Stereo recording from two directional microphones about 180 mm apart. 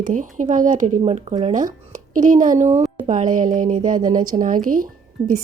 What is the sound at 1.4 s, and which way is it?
A woman's voice, 45° right (ahead or behind).